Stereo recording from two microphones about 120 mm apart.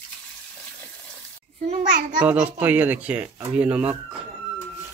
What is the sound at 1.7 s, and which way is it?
Speech, 90° right.